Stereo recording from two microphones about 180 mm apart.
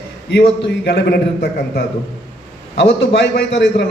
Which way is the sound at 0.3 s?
70° left (ahead or behind).